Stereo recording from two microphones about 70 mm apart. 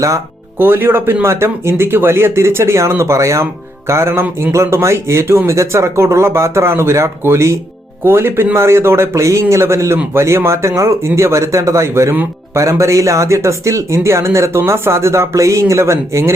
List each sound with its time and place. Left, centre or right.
0.6 s speech: right